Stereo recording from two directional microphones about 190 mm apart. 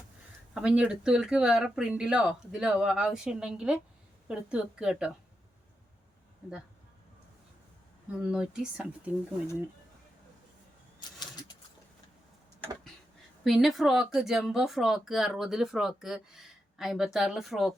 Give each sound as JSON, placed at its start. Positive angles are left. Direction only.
{"t": 0.5, "sound": "speech", "side_deg": -5}
{"t": 8.2, "sound": "speech", "side_deg": -5}
{"t": 11.2, "sound": "a sound", "side_deg": 20}
{"t": 13.4, "sound": "speech", "side_deg": 0}